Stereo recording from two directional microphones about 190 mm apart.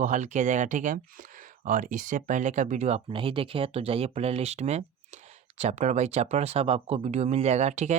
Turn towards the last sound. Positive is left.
turn(degrees=-35)  # may be behind; listen again after turning